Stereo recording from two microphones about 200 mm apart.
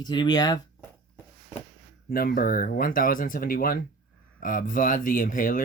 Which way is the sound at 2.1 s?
50° left (ahead or behind).